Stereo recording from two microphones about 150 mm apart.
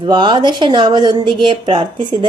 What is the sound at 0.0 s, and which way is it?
A woman's voice, 30° right (ahead or behind).